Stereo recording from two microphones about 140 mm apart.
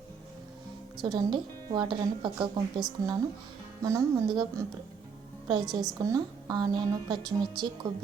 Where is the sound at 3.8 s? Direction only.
20° right (ahead or behind).